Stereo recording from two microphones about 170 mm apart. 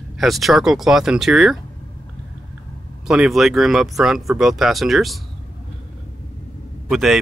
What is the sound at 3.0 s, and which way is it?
Speech, 5° right (ahead or behind).